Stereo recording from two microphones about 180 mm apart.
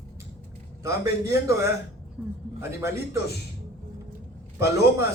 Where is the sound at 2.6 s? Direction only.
15° right (ahead or behind).